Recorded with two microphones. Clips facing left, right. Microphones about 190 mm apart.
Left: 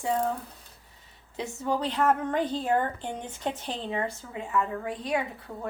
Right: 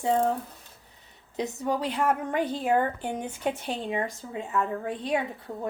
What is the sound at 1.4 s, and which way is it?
A woman's voice, 15° right (ahead or behind).